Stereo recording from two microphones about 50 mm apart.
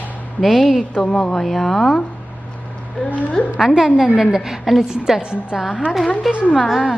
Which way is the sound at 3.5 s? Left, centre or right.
Centre.